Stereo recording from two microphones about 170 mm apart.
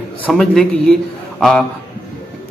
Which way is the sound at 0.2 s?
Centre (ahead or behind).